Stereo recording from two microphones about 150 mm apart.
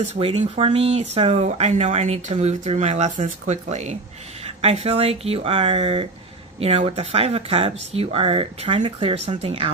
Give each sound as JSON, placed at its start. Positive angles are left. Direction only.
{"t": 0.1, "sound": "speech", "side_deg": -45}